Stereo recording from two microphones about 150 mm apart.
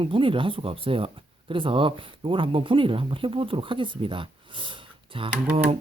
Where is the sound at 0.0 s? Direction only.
35° right (ahead or behind).